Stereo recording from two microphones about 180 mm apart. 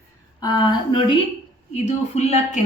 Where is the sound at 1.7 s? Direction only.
40° left (ahead or behind).